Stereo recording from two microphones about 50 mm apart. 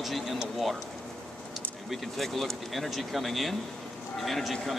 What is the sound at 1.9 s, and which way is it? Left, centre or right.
Speech, centre.